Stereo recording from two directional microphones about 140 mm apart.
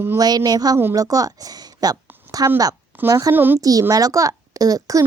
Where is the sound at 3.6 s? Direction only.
25° right (ahead or behind).